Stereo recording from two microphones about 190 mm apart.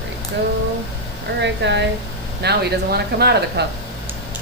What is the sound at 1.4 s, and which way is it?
Speech, 65° right (ahead or behind).